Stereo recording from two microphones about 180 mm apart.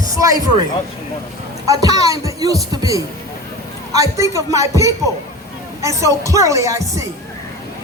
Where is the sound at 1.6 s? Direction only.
20° right (ahead or behind).